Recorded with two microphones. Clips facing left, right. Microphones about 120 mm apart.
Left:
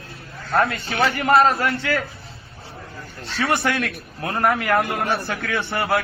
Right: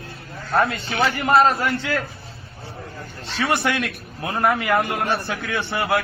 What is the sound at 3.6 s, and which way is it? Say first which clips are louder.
A man's voice: even; centre (ahead or behind).